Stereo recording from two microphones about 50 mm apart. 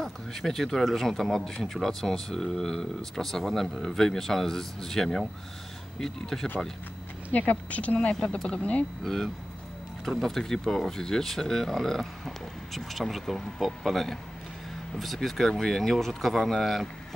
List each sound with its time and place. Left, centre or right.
0.0 s speech: centre
7.3 s speech: left
8.1 s speech: centre
9.0 s speech: centre